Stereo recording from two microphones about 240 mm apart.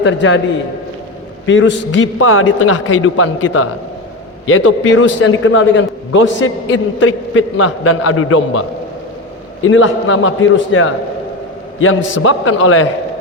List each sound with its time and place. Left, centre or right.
0.0 s a man's voice: left
1.5 s a man's voice: left
9.6 s a man's voice: left